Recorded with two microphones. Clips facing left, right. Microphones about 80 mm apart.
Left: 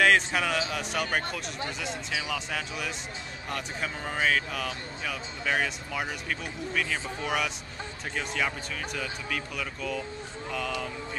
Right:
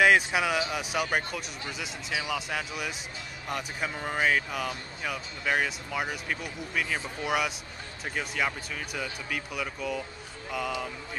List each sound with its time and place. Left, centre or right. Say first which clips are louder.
0.0 s speech: right 1 dB; centre